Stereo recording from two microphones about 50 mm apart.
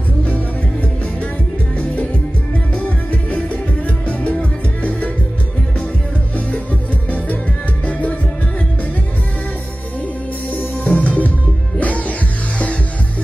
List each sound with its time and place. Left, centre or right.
2.7 s music: left
6.3 s music: left
10.5 s music: left